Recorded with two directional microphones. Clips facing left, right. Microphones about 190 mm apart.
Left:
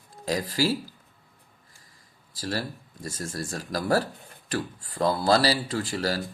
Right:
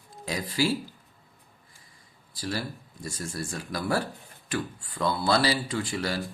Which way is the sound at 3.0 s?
40° left (ahead or behind).